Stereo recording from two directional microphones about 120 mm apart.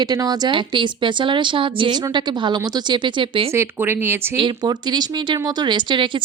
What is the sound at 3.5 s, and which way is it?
Speech, 20° right (ahead or behind).